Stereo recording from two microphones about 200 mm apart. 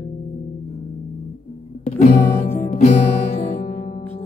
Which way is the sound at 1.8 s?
35° left (ahead or behind).